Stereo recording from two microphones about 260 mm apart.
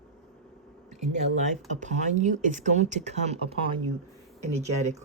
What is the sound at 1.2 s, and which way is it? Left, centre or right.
Speech, right.